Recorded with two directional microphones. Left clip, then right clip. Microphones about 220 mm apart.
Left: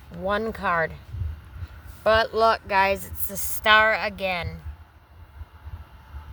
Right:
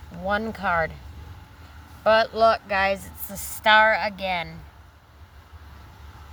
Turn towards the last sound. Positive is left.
turn(degrees=35)  # may be behind; listen again after turning